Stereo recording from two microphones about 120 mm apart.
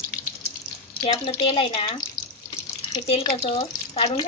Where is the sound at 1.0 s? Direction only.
60° left (ahead or behind).